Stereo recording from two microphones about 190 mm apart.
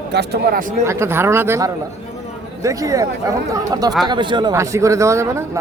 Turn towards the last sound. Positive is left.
turn(degrees=-15)  # may be behind; listen again after turning